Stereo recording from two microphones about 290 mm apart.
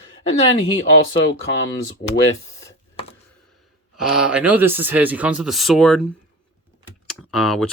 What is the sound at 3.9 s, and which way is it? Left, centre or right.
Speech, centre.